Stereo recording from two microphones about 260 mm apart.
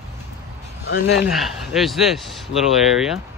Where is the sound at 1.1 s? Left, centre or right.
Centre.